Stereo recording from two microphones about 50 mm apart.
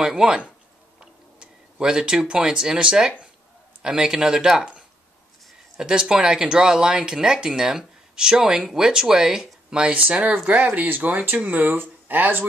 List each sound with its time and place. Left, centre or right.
0.0 s speech: centre
5.8 s speech: centre
9.9 s speech: right